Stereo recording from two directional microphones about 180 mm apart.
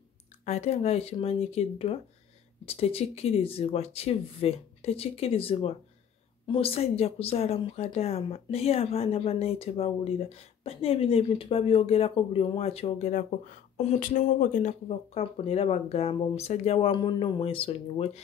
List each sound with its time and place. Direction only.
0.5 s speech: 35° left (ahead or behind)